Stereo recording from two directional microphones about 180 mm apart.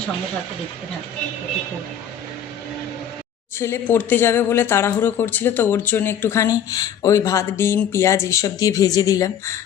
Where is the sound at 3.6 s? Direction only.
10° left (ahead or behind).